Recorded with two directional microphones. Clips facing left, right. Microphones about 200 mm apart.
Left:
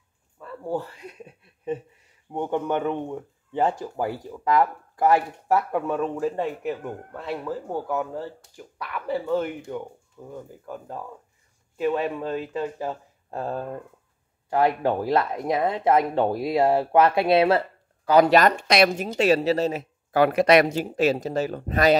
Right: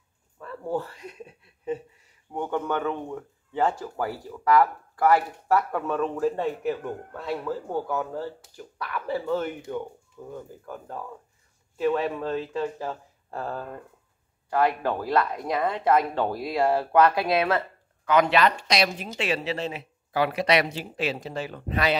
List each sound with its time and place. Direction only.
2.3 s speech: 15° left (ahead or behind)
9.1 s speech: 10° left (ahead or behind); by 21.9 s 45° left (ahead or behind)